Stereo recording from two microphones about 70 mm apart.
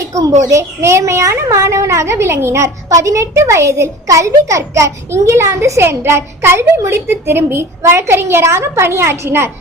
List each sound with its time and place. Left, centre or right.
0.0 s a child's voice: right